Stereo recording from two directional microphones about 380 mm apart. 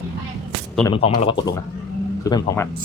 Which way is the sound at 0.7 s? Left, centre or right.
Centre.